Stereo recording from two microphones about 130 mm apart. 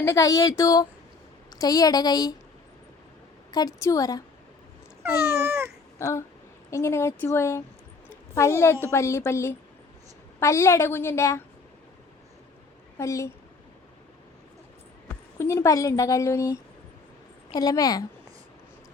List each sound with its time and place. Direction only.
0.0 s a woman's voice: 25° left (ahead or behind)
3.5 s a woman's voice: 30° left (ahead or behind)
5.3 s cat: 20° right (ahead or behind)
6.0 s a woman's voice: 20° left (ahead or behind)
13.0 s a woman's voice: 25° left (ahead or behind)
15.4 s a woman's voice: 20° left (ahead or behind)